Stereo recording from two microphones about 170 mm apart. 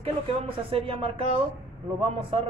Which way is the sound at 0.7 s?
30° right (ahead or behind).